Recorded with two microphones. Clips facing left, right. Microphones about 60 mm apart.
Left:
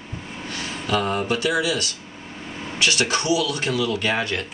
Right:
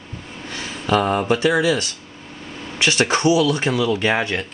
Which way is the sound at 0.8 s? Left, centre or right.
Centre.